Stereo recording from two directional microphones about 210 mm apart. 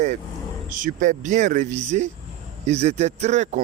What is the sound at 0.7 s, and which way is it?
Speech, 40° right (ahead or behind).